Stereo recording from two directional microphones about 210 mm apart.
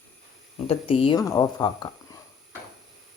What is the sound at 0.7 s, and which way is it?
Speech, 25° left (ahead or behind).